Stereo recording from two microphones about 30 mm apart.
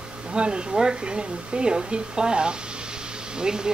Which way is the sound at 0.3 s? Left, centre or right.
Right.